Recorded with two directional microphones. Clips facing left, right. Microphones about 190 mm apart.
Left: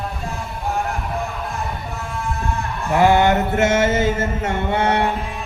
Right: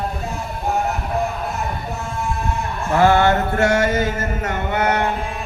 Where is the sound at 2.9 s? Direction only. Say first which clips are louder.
Even; 15° left (ahead or behind).